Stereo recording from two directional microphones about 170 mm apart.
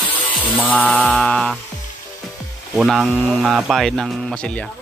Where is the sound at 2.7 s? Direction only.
5° right (ahead or behind).